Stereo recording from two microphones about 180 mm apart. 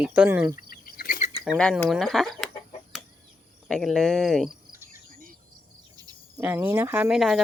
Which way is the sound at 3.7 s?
Centre (ahead or behind).